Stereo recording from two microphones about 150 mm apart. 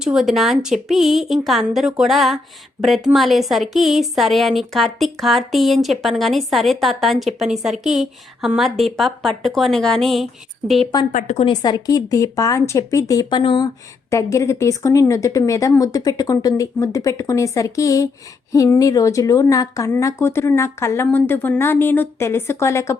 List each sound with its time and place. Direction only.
0.0 s a woman's voice: 5° right (ahead or behind)
11.1 s speech: 55° left (ahead or behind)
11.4 s speech: 30° left (ahead or behind)
14.1 s speech: 20° left (ahead or behind)